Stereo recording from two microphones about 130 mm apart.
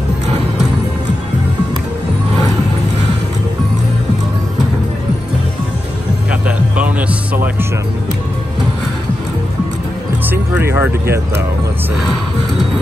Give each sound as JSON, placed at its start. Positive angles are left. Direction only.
{"t": 6.4, "sound": "music", "side_deg": -10}
{"t": 10.3, "sound": "speech", "side_deg": -20}